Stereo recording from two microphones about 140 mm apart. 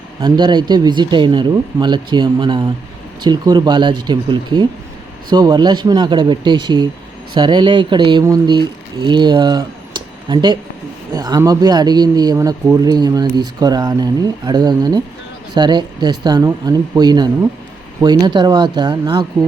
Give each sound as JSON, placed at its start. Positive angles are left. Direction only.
{"t": 0.2, "sound": "speech", "side_deg": -35}